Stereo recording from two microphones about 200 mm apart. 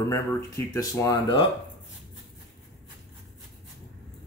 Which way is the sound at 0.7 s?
15° left (ahead or behind).